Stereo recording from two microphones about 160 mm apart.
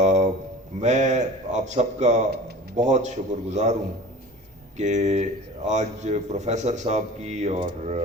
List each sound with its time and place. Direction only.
0.0 s a sound: 45° right (ahead or behind)
0.8 s a man's voice: 45° right (ahead or behind)
4.8 s a man's voice: 45° right (ahead or behind)